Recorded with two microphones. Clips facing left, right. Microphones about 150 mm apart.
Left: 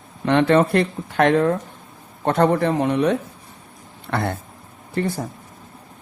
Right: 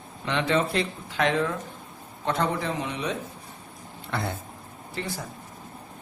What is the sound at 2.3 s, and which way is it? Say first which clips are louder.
Speech: left 9 dB; 60° left (ahead or behind).